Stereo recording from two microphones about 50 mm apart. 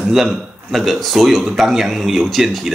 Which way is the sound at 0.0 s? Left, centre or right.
Centre.